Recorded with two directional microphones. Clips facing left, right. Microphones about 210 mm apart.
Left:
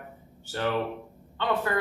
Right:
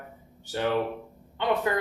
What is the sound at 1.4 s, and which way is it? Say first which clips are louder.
Speech: right 2 dB; 20° right (ahead or behind).